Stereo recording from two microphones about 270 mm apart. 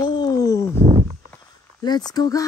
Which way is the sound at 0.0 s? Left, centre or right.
Centre.